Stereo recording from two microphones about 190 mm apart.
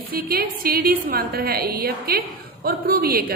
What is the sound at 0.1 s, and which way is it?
A woman's voice, 50° right (ahead or behind).